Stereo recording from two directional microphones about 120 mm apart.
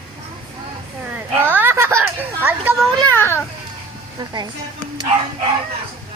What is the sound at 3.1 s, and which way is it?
Speech, 20° left (ahead or behind).